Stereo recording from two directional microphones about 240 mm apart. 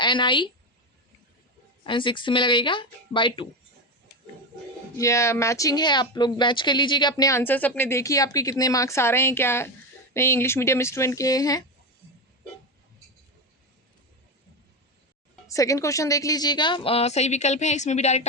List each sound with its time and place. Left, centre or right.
0.0 s a woman's voice: centre
1.8 s a woman's voice: centre
4.9 s speech: centre
15.4 s a woman's voice: centre